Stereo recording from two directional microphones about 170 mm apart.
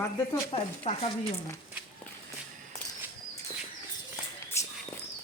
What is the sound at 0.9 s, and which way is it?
Speech, 40° left (ahead or behind).